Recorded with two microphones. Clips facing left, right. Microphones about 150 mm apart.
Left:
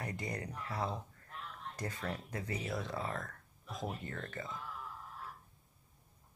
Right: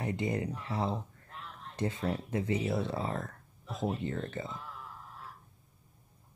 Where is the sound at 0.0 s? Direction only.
25° right (ahead or behind).